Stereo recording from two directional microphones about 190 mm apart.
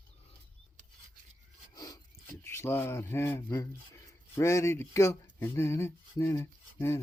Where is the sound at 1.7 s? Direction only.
20° left (ahead or behind).